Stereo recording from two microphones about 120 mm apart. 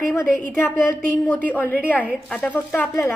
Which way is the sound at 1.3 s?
15° left (ahead or behind).